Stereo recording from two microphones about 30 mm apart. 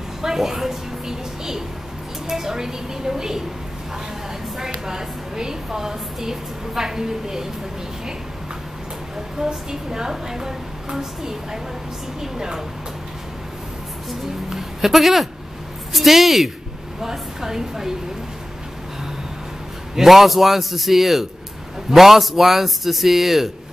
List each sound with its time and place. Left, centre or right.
0.2 s a sound: centre
2.2 s a woman's voice: centre
4.6 s a woman's voice: centre
9.4 s a woman's voice: centre
14.9 s a man's voice: centre
20.0 s a man's voice: centre